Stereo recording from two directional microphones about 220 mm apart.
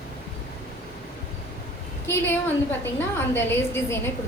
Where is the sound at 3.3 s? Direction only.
10° left (ahead or behind).